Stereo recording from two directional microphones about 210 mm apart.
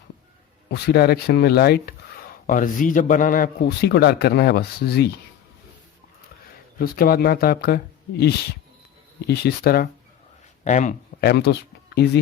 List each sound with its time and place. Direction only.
0.7 s a man's voice: 50° left (ahead or behind)
6.7 s a man's voice: 45° left (ahead or behind)
9.2 s a man's voice: 50° left (ahead or behind)
10.6 s a man's voice: 35° left (ahead or behind); by 12.2 s 50° left (ahead or behind)